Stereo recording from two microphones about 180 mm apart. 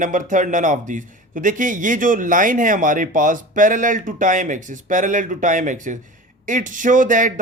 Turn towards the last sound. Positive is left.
turn(degrees=-45)  # may be behind; listen again after turning